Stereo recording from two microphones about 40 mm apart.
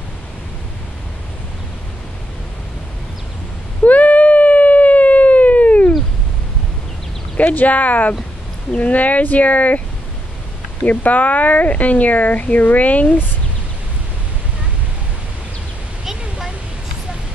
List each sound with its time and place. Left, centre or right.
3.8 s a sound: left
7.3 s speech: left
10.9 s speech: left